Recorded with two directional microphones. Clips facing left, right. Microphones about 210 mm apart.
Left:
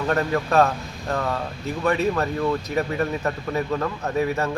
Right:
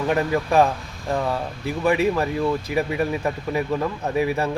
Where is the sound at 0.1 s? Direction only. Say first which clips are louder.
Right 1 dB; 15° right (ahead or behind).